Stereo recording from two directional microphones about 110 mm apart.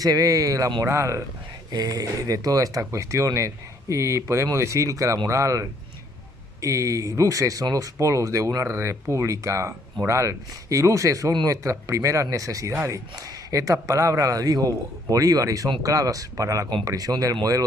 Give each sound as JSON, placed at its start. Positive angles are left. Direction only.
{"t": 0.0, "sound": "a man's voice", "side_deg": -35}